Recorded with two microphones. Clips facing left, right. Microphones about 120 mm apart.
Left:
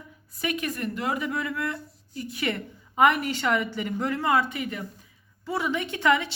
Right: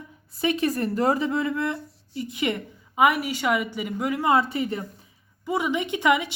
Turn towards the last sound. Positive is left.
turn(degrees=-15)  # may be behind; listen again after turning